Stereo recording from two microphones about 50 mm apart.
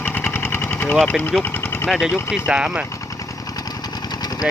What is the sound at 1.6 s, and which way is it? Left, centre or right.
Vehicle, left.